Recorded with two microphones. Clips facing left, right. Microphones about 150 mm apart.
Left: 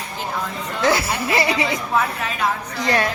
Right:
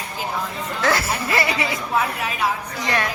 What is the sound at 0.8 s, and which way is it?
Speech, 15° left (ahead or behind).